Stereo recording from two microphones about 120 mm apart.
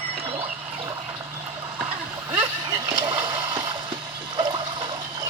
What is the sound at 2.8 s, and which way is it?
Boat, 40° right (ahead or behind).